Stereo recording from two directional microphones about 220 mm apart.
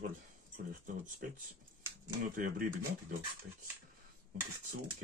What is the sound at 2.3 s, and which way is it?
Speech, 40° right (ahead or behind).